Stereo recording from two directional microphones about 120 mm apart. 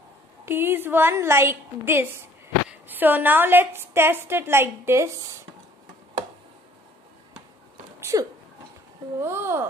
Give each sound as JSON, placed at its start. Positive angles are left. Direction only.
{"t": 0.5, "sound": "a woman's voice", "side_deg": -20}
{"t": 8.0, "sound": "a sound", "side_deg": -25}
{"t": 9.2, "sound": "a woman's voice", "side_deg": -20}